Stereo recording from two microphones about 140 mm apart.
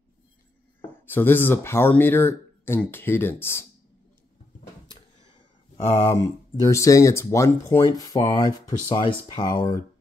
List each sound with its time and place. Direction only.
1.0 s speech: 15° left (ahead or behind)
6.0 s speech: 25° left (ahead or behind)